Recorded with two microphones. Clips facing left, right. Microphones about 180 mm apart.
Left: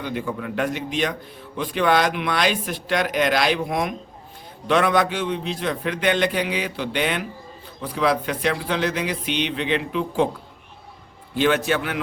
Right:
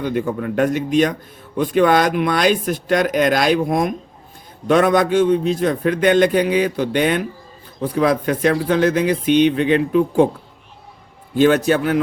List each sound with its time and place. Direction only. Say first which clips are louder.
0.0 s a man's voice: right 6 dB; 50° right (ahead or behind)
11.3 s a man's voice: right 6 dB; 40° right (ahead or behind)